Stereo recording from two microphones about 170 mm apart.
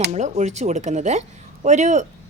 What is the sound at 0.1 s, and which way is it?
Speech, 45° right (ahead or behind).